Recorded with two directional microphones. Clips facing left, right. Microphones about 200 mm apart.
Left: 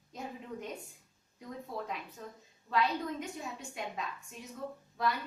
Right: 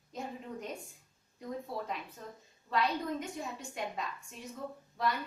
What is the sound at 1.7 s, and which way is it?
A woman's voice, centre (ahead or behind).